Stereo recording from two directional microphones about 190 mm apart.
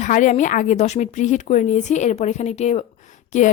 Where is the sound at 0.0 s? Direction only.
40° left (ahead or behind).